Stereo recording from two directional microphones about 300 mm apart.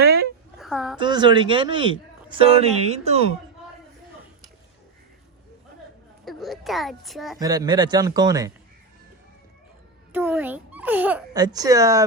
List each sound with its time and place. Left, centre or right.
0.0 s a sound: right
0.5 s a sound: centre
0.9 s a child's voice: centre
6.2 s a child's voice: centre
7.3 s a child's voice: centre
10.1 s a child's voice: centre